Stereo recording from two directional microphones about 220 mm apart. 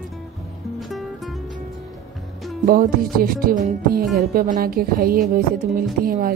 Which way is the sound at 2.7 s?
40° right (ahead or behind).